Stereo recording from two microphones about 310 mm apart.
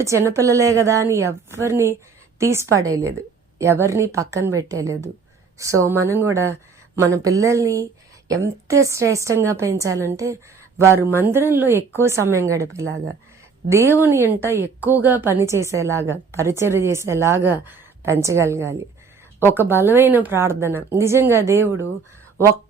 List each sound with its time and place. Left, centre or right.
0.0 s a woman's voice: centre
12.8 s speech: right
13.7 s a woman's voice: centre